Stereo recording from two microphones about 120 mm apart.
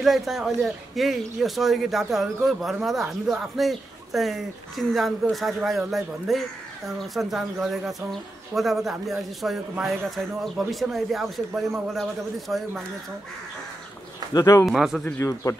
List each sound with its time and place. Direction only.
0.0 s speech: centre (ahead or behind)
14.3 s speech: 30° left (ahead or behind)
14.7 s speech: centre (ahead or behind)
15.1 s speech: 25° left (ahead or behind)